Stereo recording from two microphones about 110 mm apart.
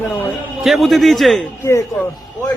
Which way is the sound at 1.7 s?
30° left (ahead or behind).